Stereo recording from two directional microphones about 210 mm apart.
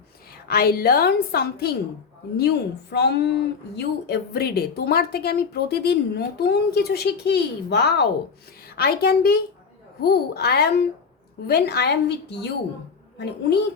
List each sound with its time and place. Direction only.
0.4 s a woman's voice: 45° left (ahead or behind)